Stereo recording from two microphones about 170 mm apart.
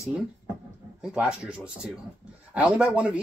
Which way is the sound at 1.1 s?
5° right (ahead or behind).